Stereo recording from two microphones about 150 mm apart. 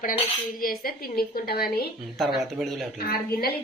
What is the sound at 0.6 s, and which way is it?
A woman's voice, 75° left (ahead or behind).